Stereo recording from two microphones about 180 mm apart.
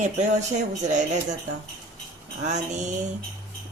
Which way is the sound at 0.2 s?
40° right (ahead or behind).